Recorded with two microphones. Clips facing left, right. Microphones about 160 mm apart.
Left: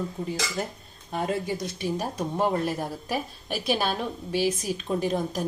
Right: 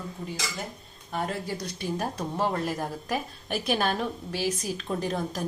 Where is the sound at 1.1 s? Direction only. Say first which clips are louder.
Left 3 dB; 20° left (ahead or behind).